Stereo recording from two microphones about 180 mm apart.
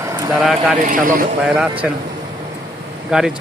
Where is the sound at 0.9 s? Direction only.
50° right (ahead or behind).